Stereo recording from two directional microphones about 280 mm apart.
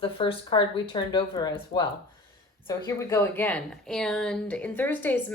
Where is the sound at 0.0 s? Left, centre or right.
Centre.